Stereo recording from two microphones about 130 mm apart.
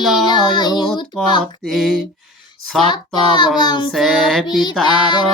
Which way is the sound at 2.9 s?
35° left (ahead or behind).